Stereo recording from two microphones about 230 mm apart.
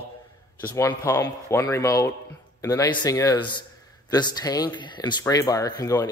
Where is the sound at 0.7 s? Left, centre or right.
Centre.